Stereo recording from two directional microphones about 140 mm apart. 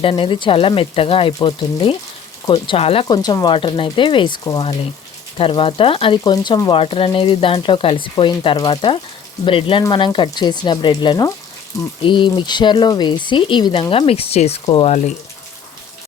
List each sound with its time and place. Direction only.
0.0 s speech: 40° left (ahead or behind)
3.1 s speech: 30° left (ahead or behind)
5.4 s speech: 40° left (ahead or behind)